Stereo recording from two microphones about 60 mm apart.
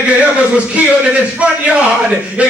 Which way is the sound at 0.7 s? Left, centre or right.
Right.